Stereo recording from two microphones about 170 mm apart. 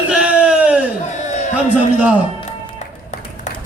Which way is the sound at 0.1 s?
5° right (ahead or behind).